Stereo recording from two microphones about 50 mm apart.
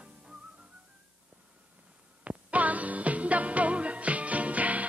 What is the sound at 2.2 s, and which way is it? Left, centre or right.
Music, right.